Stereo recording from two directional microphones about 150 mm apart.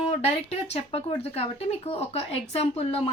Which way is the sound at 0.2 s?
45° left (ahead or behind).